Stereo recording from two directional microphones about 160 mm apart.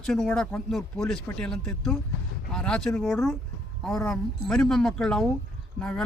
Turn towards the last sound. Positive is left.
turn(degrees=5)  # may be behind; listen again after turning